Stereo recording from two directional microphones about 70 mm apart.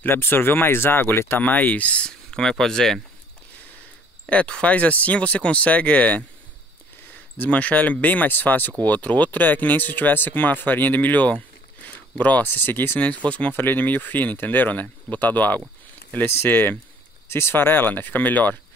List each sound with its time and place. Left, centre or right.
0.0 s speech: left
1.4 s speech: left; by 3.0 s centre
4.3 s speech: centre
7.3 s speech: centre